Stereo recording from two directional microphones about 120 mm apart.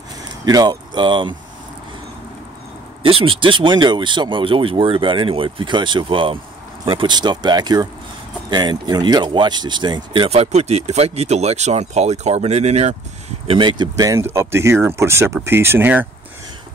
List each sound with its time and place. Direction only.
0.5 s speech: 35° right (ahead or behind)
3.0 s speech: 50° right (ahead or behind)
10.3 s speech: 65° right (ahead or behind)
13.5 s speech: 40° right (ahead or behind); by 16.1 s 15° right (ahead or behind)